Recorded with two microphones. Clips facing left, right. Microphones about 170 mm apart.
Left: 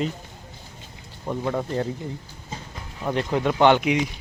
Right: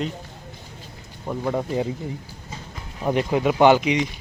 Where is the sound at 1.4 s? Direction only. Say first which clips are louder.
Right 2 dB; 10° right (ahead or behind).